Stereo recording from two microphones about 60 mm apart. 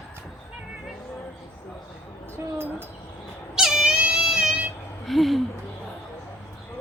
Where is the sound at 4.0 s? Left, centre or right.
Centre.